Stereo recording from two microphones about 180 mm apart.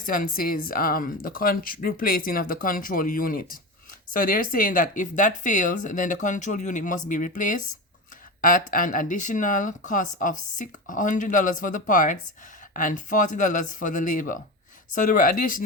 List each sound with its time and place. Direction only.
0.0 s speech: 50° left (ahead or behind)